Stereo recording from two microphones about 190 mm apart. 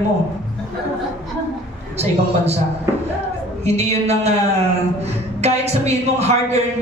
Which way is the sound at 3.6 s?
35° right (ahead or behind).